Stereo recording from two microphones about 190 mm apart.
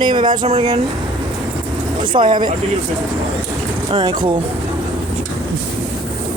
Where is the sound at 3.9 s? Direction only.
20° right (ahead or behind).